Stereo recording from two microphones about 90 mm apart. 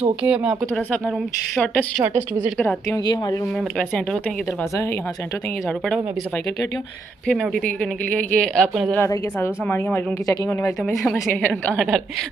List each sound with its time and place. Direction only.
0.2 s speech: 10° right (ahead or behind)
3.7 s speech: 10° left (ahead or behind)
7.2 s speech: 5° left (ahead or behind)
7.6 s speech: 15° left (ahead or behind)
9.0 s a woman's voice: 30° left (ahead or behind)
10.9 s speech: centre (ahead or behind)